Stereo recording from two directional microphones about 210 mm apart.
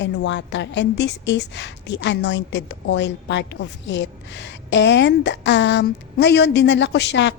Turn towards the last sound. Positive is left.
turn(degrees=55)  # may be behind; listen again after turning